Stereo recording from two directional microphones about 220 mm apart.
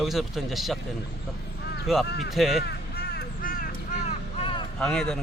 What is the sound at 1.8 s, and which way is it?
Speech, centre (ahead or behind).